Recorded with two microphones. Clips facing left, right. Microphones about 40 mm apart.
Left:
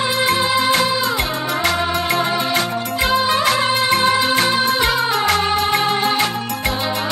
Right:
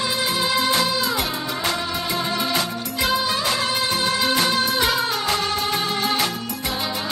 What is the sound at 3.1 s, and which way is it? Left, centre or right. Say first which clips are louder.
Music: left 6 dB; left.